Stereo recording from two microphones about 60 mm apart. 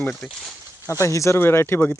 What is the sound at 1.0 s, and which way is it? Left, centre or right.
Speech, left.